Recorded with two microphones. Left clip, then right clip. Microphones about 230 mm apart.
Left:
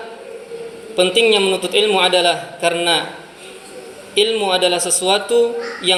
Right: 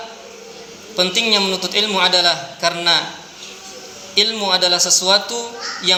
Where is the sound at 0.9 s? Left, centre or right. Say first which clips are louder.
Left 3 dB; right.